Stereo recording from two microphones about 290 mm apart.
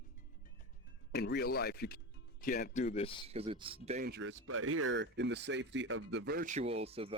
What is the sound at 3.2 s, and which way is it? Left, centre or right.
Speech, centre.